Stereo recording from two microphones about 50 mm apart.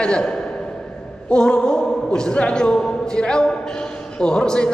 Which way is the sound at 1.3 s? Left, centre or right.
Centre.